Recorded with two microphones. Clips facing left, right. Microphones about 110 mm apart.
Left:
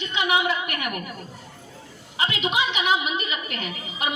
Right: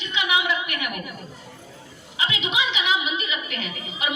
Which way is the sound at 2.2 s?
45° left (ahead or behind).